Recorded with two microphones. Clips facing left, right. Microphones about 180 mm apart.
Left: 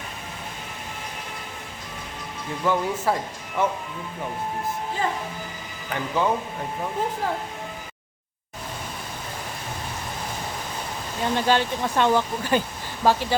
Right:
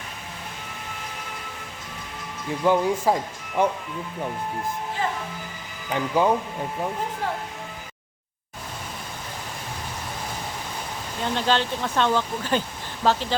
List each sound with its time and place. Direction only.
2.6 s speech: 15° right (ahead or behind)
5.9 s speech: 20° right (ahead or behind)
11.2 s speech: 10° left (ahead or behind)